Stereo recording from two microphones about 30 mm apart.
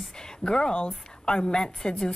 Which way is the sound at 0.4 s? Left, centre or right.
Left.